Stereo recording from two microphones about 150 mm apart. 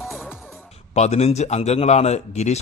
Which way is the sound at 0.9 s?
45° left (ahead or behind).